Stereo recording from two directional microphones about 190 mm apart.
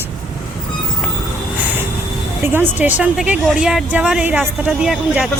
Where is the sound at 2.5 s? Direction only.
10° right (ahead or behind).